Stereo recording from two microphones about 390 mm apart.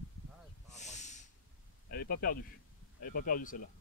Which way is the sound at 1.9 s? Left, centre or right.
Left.